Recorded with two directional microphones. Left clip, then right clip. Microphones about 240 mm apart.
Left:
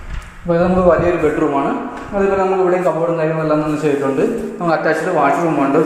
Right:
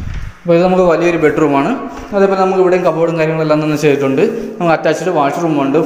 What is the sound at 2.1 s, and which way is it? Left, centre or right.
A man's voice, right.